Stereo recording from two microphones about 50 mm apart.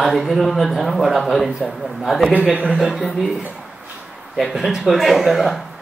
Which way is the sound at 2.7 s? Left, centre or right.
Centre.